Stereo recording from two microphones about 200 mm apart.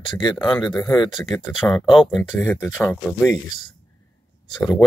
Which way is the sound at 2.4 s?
15° left (ahead or behind).